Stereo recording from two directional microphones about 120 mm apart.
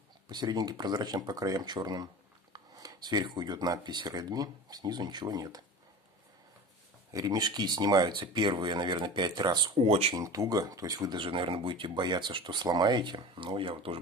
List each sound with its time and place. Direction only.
0.3 s speech: 35° right (ahead or behind)
7.1 s speech: 30° right (ahead or behind)
9.8 s speech: 60° right (ahead or behind)
10.1 s speech: 30° right (ahead or behind); by 13.9 s 50° right (ahead or behind)